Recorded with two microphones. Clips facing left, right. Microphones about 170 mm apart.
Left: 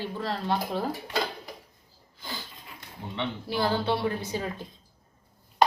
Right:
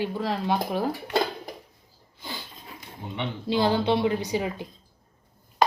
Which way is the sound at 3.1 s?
20° right (ahead or behind).